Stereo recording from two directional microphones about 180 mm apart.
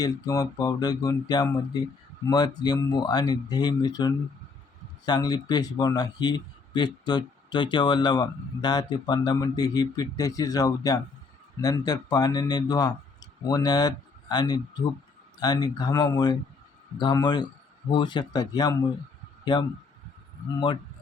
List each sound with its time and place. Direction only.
0.0 s speech: 20° left (ahead or behind)